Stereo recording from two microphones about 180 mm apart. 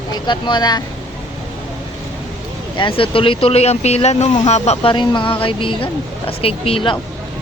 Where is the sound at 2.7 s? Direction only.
30° left (ahead or behind).